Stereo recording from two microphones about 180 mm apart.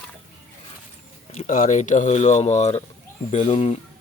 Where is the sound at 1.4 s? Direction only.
45° left (ahead or behind).